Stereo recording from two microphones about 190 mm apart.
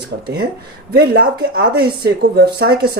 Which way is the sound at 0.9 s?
55° right (ahead or behind).